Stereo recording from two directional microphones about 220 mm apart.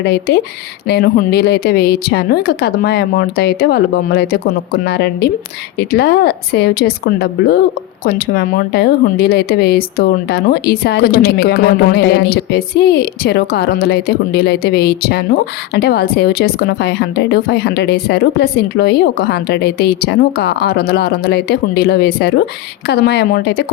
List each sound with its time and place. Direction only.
0.0 s speech: 50° left (ahead or behind)